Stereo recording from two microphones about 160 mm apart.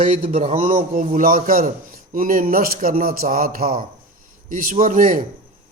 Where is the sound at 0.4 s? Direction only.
40° right (ahead or behind).